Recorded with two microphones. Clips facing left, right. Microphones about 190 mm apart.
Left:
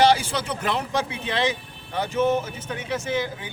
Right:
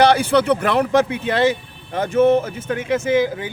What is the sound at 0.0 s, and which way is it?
Speech, 60° right (ahead or behind).